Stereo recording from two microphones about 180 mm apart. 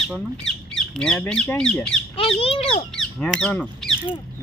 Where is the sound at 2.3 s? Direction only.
30° left (ahead or behind).